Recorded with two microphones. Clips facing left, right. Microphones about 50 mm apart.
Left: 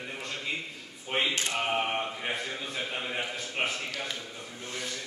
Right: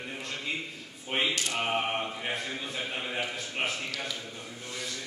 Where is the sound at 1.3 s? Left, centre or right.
Left.